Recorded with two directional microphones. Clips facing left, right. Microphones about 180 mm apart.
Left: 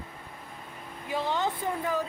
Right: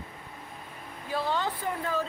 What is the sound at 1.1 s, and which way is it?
Speech, 15° left (ahead or behind).